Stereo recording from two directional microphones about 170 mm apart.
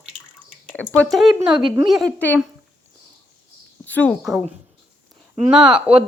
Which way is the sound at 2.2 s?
10° left (ahead or behind).